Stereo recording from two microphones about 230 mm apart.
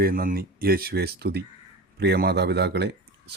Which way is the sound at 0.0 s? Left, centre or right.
Right.